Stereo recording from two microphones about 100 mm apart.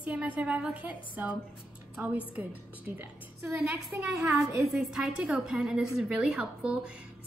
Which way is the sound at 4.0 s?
5° right (ahead or behind).